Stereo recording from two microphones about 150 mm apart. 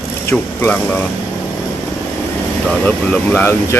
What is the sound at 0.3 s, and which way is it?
Speech, 15° left (ahead or behind).